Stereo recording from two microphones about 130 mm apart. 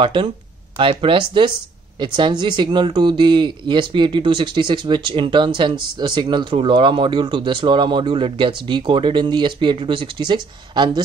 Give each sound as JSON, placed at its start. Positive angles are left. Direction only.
{"t": 0.0, "sound": "speech", "side_deg": -40}